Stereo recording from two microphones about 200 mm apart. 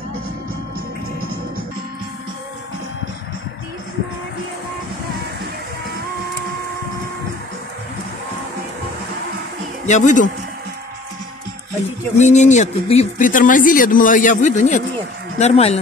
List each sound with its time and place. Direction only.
9.8 s speech: 35° left (ahead or behind)
12.2 s speech: 35° left (ahead or behind)